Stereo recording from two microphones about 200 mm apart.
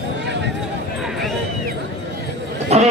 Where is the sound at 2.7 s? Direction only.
30° right (ahead or behind).